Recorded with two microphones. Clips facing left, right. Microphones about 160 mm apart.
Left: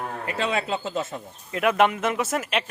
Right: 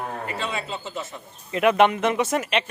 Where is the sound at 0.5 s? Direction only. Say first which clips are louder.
Left 5 dB; 75° left (ahead or behind).